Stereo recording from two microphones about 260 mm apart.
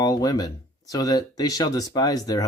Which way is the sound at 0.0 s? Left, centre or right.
Centre.